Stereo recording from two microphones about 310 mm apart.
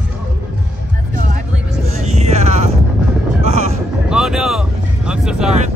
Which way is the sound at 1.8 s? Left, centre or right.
Right.